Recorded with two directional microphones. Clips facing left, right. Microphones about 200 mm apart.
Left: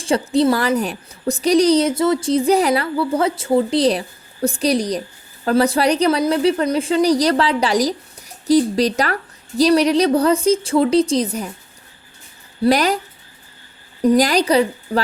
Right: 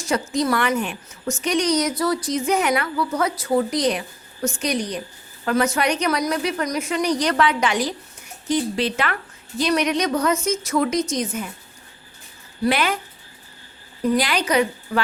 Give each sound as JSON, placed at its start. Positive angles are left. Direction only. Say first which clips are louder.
{"t": 0.0, "sound": "a woman's voice", "louder": "left 6 dB", "side_deg": 30}
{"t": 12.6, "sound": "a woman's voice", "louder": "left 5 dB", "side_deg": 35}
{"t": 14.0, "sound": "a woman's voice", "louder": "left 6 dB", "side_deg": 40}